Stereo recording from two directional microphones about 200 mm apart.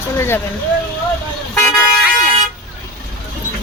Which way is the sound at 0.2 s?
10° left (ahead or behind).